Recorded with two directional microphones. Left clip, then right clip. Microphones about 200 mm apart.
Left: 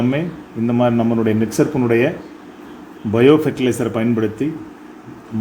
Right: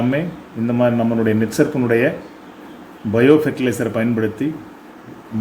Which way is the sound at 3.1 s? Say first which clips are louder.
Left 1 dB; 10° left (ahead or behind).